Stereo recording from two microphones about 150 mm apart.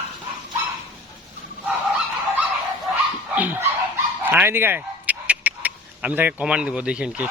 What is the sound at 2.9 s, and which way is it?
Dog, 10° right (ahead or behind).